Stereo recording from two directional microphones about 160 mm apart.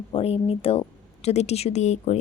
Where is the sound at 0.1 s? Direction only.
35° left (ahead or behind).